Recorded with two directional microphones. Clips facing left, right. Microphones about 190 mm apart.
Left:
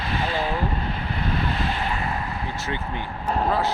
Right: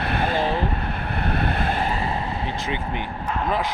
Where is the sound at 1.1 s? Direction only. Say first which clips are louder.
Right 3 dB; 60° right (ahead or behind).